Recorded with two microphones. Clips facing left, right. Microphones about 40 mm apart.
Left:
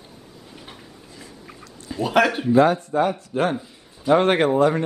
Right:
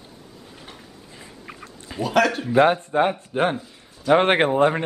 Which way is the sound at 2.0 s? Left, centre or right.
Centre.